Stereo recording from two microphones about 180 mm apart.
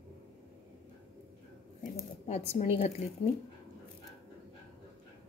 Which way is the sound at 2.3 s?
35° left (ahead or behind).